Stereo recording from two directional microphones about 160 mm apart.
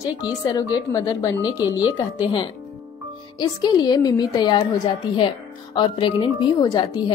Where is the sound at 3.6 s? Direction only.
25° left (ahead or behind).